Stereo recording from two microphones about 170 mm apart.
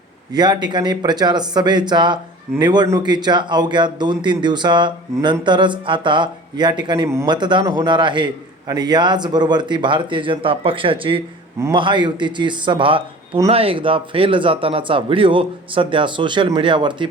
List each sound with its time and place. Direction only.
0.3 s a man's voice: 25° right (ahead or behind)